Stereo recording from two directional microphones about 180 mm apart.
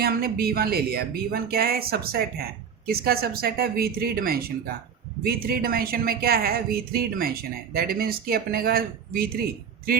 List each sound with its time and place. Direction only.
0.0 s speech: 55° right (ahead or behind)